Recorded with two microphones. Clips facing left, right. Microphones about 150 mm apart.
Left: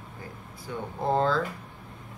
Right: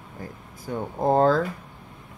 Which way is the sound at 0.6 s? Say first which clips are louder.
Right 5 dB; 45° right (ahead or behind).